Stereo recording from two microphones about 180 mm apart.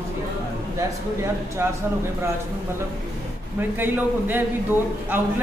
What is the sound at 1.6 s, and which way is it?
Speech, 15° right (ahead or behind).